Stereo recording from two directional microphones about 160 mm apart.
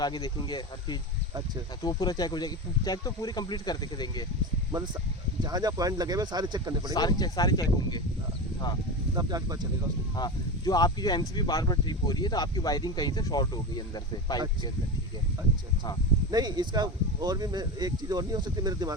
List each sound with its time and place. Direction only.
0.0 s speech: 25° left (ahead or behind)
5.4 s speech: 25° right (ahead or behind)
6.9 s speech: 25° left (ahead or behind)
9.1 s speech: 25° right (ahead or behind)
10.2 s speech: 25° left (ahead or behind)
16.3 s speech: 25° right (ahead or behind)